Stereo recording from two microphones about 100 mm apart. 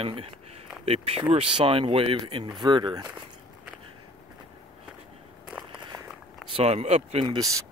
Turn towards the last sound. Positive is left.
turn(degrees=-35)  # may be behind; listen again after turning